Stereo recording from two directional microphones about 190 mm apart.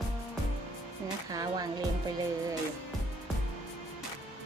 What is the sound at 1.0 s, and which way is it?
Music, 20° right (ahead or behind).